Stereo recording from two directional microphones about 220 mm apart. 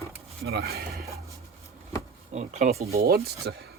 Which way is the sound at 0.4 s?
45° right (ahead or behind).